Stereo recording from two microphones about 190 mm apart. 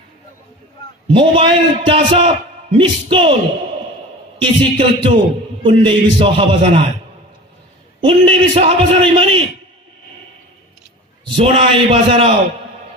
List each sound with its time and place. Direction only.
1.0 s a man's voice: 30° right (ahead or behind)
4.6 s a man's voice: 30° right (ahead or behind)
8.0 s a man's voice: 30° right (ahead or behind)
11.2 s a man's voice: 30° right (ahead or behind)